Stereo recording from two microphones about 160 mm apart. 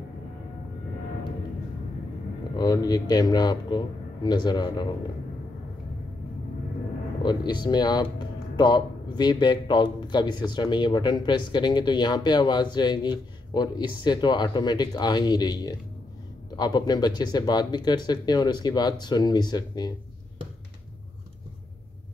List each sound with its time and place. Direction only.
2.5 s a man's voice: 25° left (ahead or behind)
7.2 s a man's voice: 30° left (ahead or behind)